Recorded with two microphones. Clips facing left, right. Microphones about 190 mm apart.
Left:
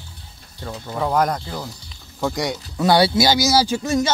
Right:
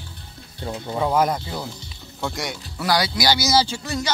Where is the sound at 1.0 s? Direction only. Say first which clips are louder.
Even; 5° right (ahead or behind).